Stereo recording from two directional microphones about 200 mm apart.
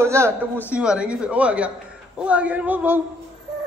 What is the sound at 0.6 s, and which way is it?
A man's voice, 5° right (ahead or behind).